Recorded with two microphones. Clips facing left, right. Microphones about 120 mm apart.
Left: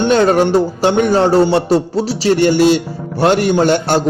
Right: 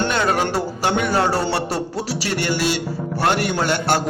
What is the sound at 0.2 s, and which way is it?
Speech, 35° left (ahead or behind).